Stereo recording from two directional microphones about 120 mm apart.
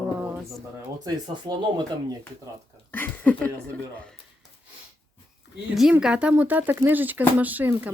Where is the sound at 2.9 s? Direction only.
15° left (ahead or behind).